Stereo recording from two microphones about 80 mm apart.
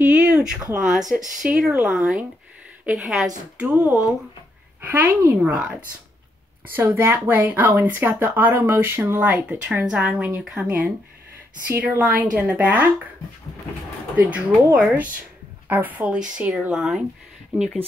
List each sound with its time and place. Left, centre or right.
0.0 s a sound: centre
0.7 s speech: centre
3.5 s speech: centre
6.7 s speech: right
9.8 s speech: centre
11.6 s speech: right
14.1 s speech: centre